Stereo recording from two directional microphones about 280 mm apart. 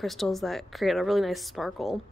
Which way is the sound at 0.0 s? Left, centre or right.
Centre.